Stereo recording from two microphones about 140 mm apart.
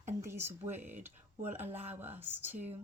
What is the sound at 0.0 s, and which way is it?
Speech, 20° right (ahead or behind).